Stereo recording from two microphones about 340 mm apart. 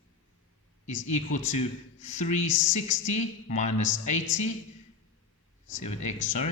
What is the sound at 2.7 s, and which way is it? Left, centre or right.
Speech, left.